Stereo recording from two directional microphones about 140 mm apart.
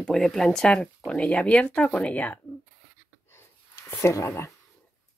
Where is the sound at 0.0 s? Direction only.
Centre (ahead or behind).